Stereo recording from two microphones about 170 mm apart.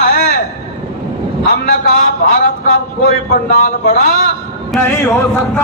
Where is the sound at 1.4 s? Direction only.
60° left (ahead or behind).